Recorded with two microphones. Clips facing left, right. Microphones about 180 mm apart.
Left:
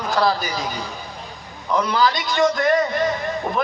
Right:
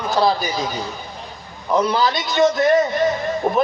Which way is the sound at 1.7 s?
25° right (ahead or behind).